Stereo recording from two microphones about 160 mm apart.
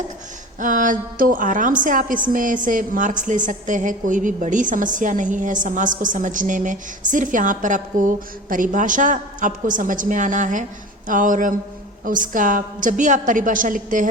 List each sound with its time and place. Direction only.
0.6 s a woman's voice: 55° right (ahead or behind)